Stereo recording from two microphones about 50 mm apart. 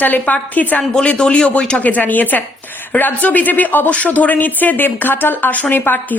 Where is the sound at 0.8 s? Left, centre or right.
Centre.